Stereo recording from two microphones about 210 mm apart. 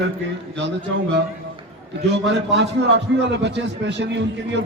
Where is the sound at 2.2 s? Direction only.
55° right (ahead or behind).